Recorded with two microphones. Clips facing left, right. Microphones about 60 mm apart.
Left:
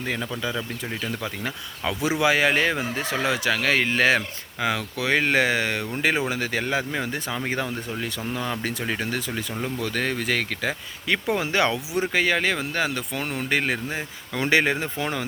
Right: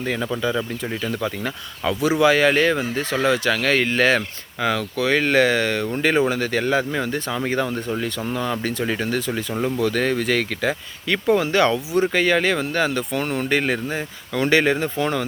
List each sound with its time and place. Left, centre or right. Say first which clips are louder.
1.0 s speech: right 5 dB; centre
2.0 s speech: right 4 dB; centre
11.1 s speech: right 5 dB; centre